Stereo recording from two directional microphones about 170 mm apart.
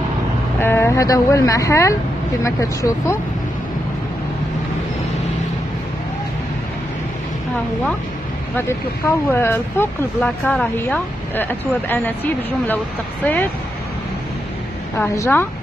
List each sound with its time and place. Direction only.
0.6 s speech: 15° left (ahead or behind)
8.5 s speech: 15° left (ahead or behind)
15.0 s speech: 15° left (ahead or behind)